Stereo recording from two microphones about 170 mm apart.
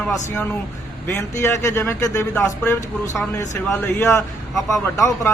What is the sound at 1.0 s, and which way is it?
A man's voice, 15° left (ahead or behind).